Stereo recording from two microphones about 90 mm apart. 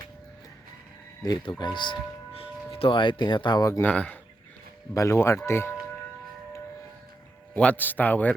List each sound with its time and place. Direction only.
1.2 s speech: 50° left (ahead or behind)
3.8 s speech: 15° left (ahead or behind)
4.9 s speech: 30° left (ahead or behind)
7.5 s speech: 15° left (ahead or behind)